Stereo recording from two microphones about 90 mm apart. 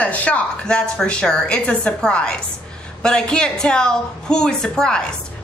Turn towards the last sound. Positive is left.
turn(degrees=10)  # may be behind; listen again after turning